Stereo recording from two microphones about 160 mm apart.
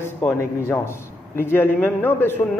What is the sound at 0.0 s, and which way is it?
A man's voice, 15° left (ahead or behind).